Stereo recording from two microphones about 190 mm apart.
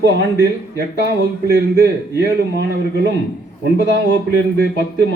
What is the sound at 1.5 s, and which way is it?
A man's voice, 60° right (ahead or behind).